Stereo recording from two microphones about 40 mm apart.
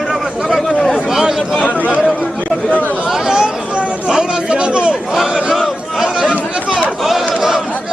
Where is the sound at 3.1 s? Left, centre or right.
Centre.